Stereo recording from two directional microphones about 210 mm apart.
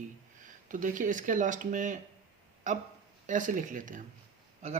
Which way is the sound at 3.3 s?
35° right (ahead or behind).